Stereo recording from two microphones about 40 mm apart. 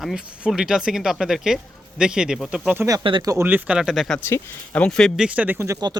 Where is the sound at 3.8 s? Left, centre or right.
Centre.